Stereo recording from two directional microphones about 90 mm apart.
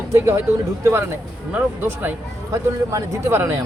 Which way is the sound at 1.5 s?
20° right (ahead or behind).